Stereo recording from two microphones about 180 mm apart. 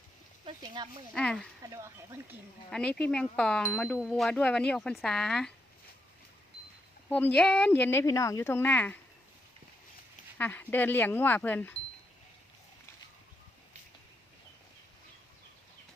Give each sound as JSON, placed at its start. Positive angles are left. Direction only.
{"t": 0.4, "sound": "speech", "side_deg": -25}
{"t": 1.1, "sound": "speech", "side_deg": 5}
{"t": 1.7, "sound": "speech", "side_deg": -15}
{"t": 2.6, "sound": "speech", "side_deg": 5}
{"t": 7.1, "sound": "speech", "side_deg": 10}
{"t": 10.3, "sound": "speech", "side_deg": 10}